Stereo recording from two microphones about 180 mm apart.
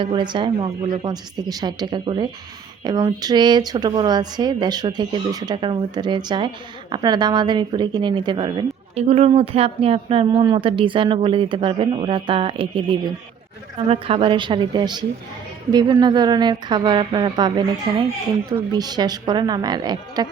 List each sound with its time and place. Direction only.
0.0 s a woman's voice: 25° right (ahead or behind)